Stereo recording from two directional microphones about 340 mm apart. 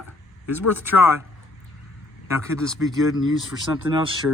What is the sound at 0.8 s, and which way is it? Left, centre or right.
Speech, centre.